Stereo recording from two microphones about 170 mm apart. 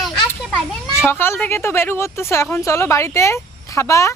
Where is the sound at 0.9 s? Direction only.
15° left (ahead or behind).